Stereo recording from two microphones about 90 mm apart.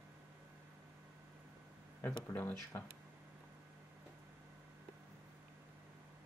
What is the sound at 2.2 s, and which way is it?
Speech, 30° left (ahead or behind).